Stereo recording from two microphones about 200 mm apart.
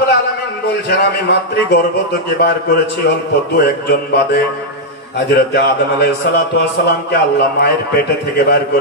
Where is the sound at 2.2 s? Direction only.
55° left (ahead or behind).